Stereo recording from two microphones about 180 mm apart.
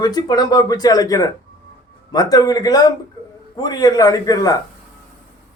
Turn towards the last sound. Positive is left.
turn(degrees=20)  # may be behind; listen again after turning